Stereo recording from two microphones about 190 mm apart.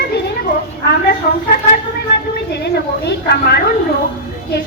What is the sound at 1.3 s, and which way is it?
Speech, 55° left (ahead or behind).